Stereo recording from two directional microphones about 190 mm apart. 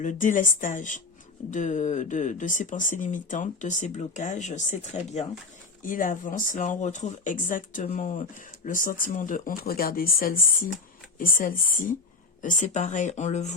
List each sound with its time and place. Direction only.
0.0 s speech: 40° left (ahead or behind)